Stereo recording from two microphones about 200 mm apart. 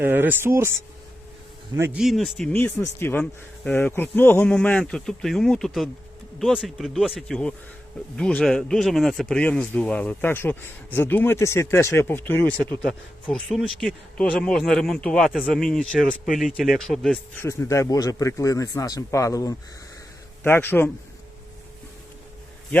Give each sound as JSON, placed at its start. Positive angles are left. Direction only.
{"t": 0.0, "sound": "speech", "side_deg": -10}
{"t": 2.0, "sound": "speech", "side_deg": 0}
{"t": 17.4, "sound": "speech", "side_deg": 15}